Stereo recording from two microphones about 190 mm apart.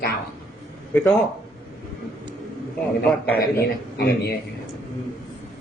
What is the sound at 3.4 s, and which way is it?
Speech, 55° left (ahead or behind).